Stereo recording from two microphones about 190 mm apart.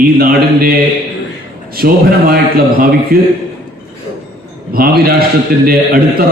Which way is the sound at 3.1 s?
50° right (ahead or behind).